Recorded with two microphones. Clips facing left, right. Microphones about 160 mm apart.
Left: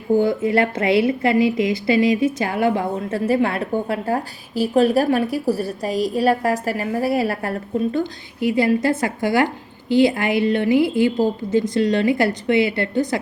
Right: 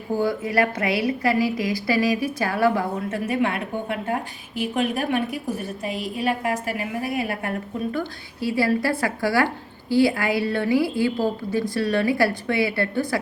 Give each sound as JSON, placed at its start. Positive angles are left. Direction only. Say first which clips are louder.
{"t": 0.2, "sound": "a woman's voice", "louder": "left 4 dB", "side_deg": 25}
{"t": 8.4, "sound": "a woman's voice", "louder": "left 4 dB", "side_deg": 20}